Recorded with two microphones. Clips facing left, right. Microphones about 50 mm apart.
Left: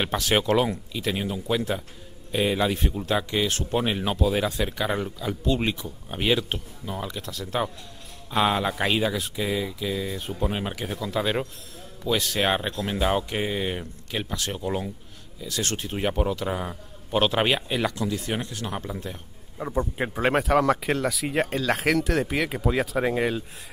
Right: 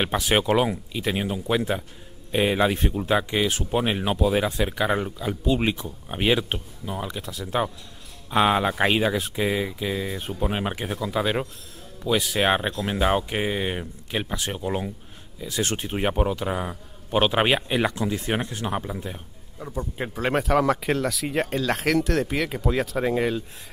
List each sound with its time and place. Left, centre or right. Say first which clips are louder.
0.0 s speech: right 1 dB; centre
10.9 s speech: right 1 dB; centre
19.6 s a man's voice: left 5 dB; left
20.0 s speech: even; centre